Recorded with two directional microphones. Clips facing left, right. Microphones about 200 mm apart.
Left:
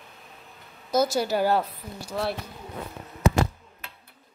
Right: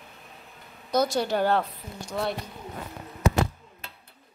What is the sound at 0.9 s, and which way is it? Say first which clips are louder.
A woman's voice: left 1 dB; 5° left (ahead or behind).